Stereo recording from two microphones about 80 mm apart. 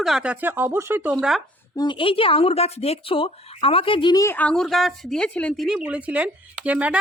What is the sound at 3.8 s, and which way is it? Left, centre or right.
Speech, left.